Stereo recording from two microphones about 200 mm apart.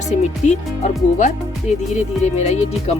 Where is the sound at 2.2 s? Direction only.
35° left (ahead or behind).